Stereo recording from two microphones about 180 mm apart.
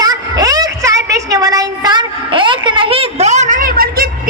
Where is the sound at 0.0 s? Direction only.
20° right (ahead or behind).